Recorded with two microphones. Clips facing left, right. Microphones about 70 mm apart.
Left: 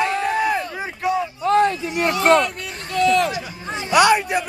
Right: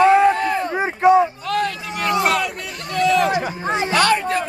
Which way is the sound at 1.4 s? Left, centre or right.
Left.